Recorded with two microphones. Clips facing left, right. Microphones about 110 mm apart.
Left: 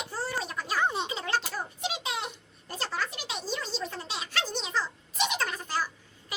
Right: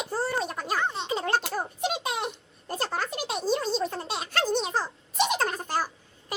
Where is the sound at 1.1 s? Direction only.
50° right (ahead or behind).